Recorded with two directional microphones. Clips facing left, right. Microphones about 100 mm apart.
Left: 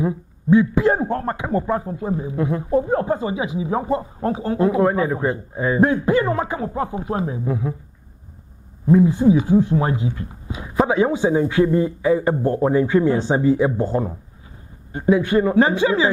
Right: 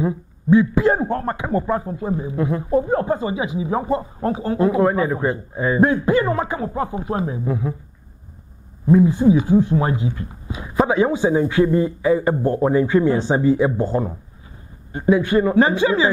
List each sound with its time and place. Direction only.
0.0 s speech: 15° right (ahead or behind)
8.9 s speech: 20° right (ahead or behind)
12.4 s speech: 30° right (ahead or behind)
12.7 s speech: 20° right (ahead or behind)
13.7 s speech: 30° right (ahead or behind)